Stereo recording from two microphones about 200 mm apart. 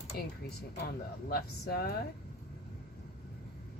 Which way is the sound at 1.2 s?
50° left (ahead or behind).